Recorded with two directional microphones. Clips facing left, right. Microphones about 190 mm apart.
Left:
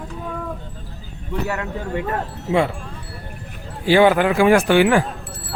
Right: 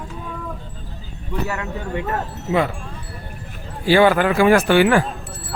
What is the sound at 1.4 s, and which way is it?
Speech, 35° left (ahead or behind).